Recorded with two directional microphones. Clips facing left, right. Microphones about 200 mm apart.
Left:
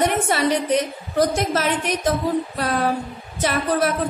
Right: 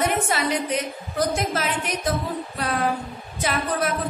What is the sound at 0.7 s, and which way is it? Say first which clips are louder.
A woman's voice: left 6 dB; 40° left (ahead or behind).